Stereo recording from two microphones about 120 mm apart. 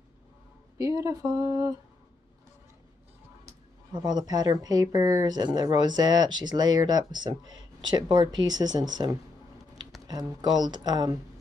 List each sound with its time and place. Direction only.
0.7 s speech: 30° right (ahead or behind)
3.9 s speech: 35° right (ahead or behind)